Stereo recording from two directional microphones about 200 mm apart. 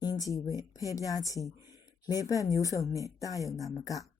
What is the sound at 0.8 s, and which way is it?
A woman's voice, 15° left (ahead or behind).